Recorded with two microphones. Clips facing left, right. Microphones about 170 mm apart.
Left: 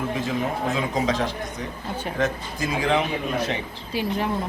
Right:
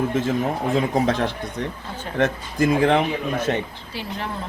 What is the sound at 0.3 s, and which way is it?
Speech, 55° right (ahead or behind).